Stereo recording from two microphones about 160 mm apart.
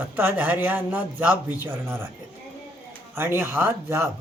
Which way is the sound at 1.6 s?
15° right (ahead or behind).